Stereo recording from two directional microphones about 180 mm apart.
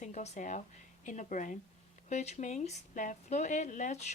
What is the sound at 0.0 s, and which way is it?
Speech, 40° left (ahead or behind).